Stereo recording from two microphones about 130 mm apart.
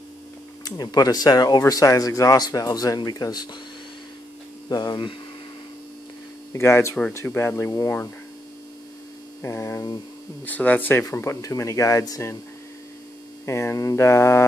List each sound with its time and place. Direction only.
0.7 s speech: 30° left (ahead or behind)
4.6 s speech: 35° left (ahead or behind)
6.5 s speech: 20° left (ahead or behind)
9.4 s speech: 20° left (ahead or behind)
13.5 s speech: 20° left (ahead or behind)